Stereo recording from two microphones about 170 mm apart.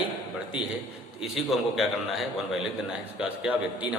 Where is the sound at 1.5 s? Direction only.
Centre (ahead or behind).